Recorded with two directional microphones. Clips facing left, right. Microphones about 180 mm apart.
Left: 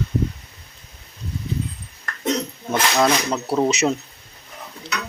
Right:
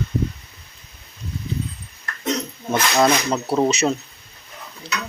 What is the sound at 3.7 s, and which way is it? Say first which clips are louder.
Speech: even; 15° left (ahead or behind).